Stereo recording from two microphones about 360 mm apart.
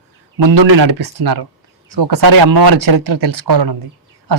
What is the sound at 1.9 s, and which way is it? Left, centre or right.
Speech, right.